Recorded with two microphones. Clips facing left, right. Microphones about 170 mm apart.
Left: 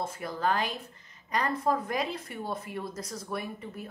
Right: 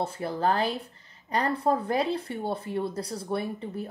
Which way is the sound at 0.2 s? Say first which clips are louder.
Right 3 dB; 30° right (ahead or behind).